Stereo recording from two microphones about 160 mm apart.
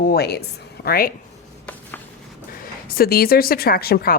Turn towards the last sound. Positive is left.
turn(degrees=70)  # may be behind; listen again after turning